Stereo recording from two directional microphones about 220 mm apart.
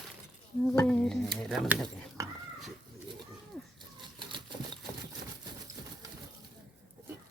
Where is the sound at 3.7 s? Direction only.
20° right (ahead or behind).